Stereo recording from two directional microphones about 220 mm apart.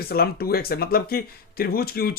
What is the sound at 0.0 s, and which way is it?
Speech, 45° left (ahead or behind).